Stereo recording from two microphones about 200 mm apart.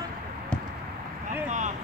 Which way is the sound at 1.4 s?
40° right (ahead or behind).